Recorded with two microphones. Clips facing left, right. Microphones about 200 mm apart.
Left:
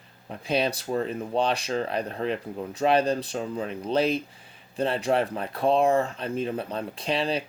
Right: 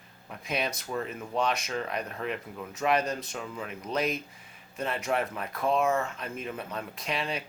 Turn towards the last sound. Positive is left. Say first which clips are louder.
# left 6 dB
turn(degrees=30)  # may be behind; listen again after turning